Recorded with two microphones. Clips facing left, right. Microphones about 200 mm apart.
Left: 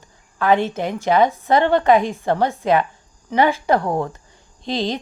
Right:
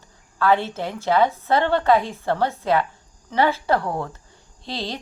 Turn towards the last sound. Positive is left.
turn(degrees=20)  # may be behind; listen again after turning